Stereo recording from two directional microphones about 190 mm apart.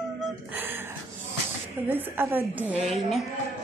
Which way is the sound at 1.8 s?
10° right (ahead or behind).